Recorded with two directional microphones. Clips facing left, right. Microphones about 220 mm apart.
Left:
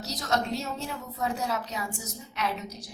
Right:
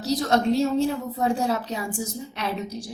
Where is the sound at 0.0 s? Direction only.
30° right (ahead or behind).